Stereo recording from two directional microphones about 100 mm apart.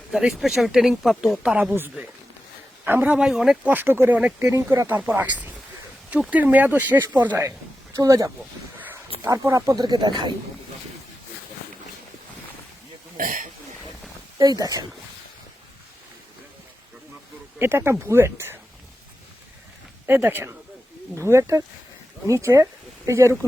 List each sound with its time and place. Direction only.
0.1 s speech: 5° right (ahead or behind)
1.4 s speech: 10° right (ahead or behind)
2.8 s speech: 15° right (ahead or behind)
3.7 s speech: 20° right (ahead or behind)
4.9 s speech: 20° right (ahead or behind)
7.9 s speech: 35° right (ahead or behind)
9.7 s speech: 45° right (ahead or behind)
14.3 s speech: 40° right (ahead or behind)
17.6 s speech: 25° right (ahead or behind)
20.1 s speech: 20° right (ahead or behind)